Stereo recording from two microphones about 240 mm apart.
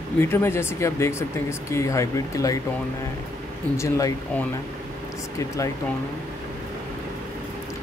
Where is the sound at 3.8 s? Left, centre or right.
Centre.